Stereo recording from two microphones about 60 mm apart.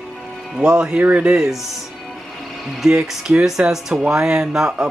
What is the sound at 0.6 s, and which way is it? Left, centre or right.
Speech, centre.